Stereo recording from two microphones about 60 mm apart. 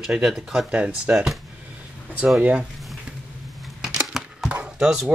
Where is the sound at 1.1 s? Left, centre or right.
Centre.